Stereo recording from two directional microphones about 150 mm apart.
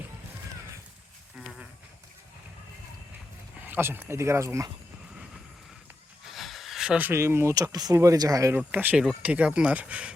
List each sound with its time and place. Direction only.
1.4 s a sound: centre (ahead or behind)
3.6 s speech: 15° right (ahead or behind)
6.2 s speech: centre (ahead or behind); by 8.5 s 20° right (ahead or behind)
8.5 s speech: 10° right (ahead or behind)